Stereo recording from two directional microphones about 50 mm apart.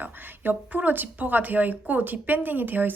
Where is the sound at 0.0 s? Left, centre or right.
Right.